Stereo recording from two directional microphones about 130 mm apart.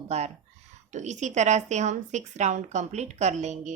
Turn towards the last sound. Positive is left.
turn(degrees=-65)  # may be behind; listen again after turning